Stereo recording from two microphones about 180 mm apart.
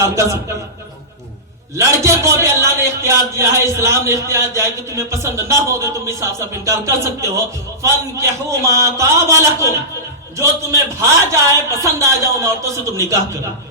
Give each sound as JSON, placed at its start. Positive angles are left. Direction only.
{"t": 0.0, "sound": "a man's voice", "side_deg": -15}
{"t": 1.7, "sound": "a man's voice", "side_deg": -15}